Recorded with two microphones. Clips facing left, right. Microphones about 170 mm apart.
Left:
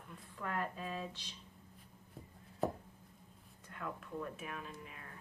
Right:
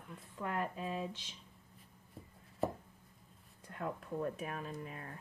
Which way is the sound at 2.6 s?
Centre (ahead or behind).